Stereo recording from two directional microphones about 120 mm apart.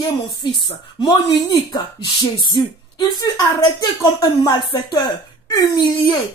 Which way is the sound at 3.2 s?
35° left (ahead or behind).